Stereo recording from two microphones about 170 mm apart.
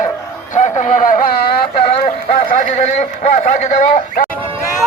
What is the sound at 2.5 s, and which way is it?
Speech, 40° left (ahead or behind).